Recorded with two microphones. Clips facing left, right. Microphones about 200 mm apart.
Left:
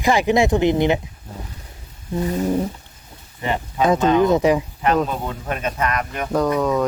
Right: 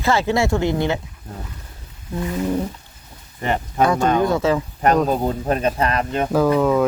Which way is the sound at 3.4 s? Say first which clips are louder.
Right 2 dB; 45° right (ahead or behind).